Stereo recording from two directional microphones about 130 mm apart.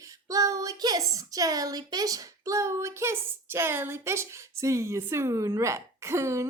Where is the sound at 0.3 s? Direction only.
25° right (ahead or behind).